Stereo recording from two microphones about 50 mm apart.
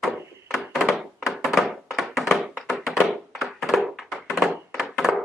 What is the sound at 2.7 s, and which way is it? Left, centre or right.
Thunk, centre.